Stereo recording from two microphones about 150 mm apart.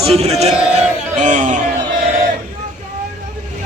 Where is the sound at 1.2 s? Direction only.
55° right (ahead or behind).